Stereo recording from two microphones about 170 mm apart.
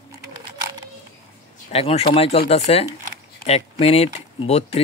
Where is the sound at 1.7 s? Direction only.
35° left (ahead or behind).